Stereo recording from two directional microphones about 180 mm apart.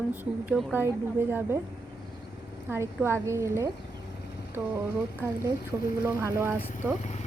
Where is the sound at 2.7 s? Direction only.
15° right (ahead or behind).